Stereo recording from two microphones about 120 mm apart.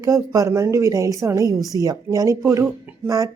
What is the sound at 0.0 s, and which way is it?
Speech, 25° right (ahead or behind).